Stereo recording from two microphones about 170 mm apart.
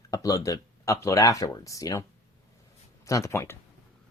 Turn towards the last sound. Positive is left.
turn(degrees=15)  # may be behind; listen again after turning